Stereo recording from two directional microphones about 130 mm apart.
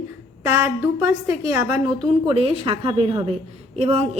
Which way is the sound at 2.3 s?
50° right (ahead or behind).